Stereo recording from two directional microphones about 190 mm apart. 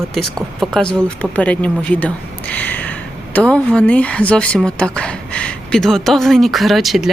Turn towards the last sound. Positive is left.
turn(degrees=0)  # may be behind; listen again after turning